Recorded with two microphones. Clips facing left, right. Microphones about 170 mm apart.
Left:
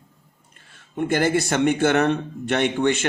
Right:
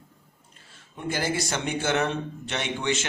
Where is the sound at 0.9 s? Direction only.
60° left (ahead or behind).